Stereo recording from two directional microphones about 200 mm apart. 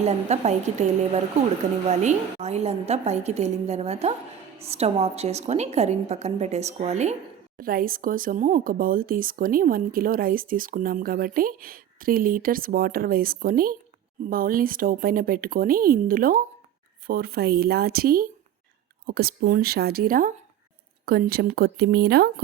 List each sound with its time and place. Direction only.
0.0 s a woman's voice: 35° right (ahead or behind)
7.6 s speech: 45° right (ahead or behind)